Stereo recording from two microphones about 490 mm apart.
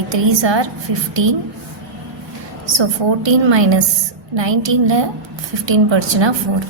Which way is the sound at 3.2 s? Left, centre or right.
Right.